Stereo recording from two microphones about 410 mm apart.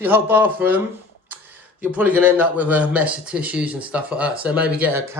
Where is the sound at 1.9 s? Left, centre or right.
Centre.